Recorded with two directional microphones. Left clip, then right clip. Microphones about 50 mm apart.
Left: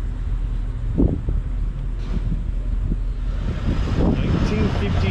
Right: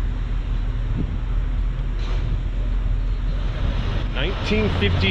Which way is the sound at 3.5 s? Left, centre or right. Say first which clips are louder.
Left 3 dB; left.